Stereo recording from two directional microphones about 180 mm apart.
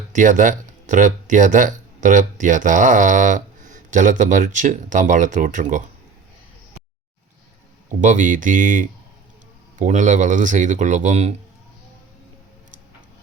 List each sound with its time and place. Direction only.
0.1 s speech: 45° right (ahead or behind)
8.0 s speech: 45° right (ahead or behind)